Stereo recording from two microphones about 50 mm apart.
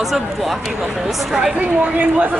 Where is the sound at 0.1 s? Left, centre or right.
Centre.